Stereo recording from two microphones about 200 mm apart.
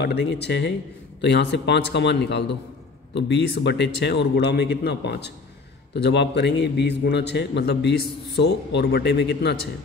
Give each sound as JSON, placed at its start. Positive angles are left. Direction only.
{"t": 0.0, "sound": "a man's voice", "side_deg": 55}